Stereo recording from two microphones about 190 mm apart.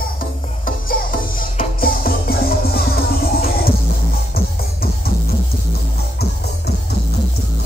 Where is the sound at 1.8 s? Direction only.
50° left (ahead or behind).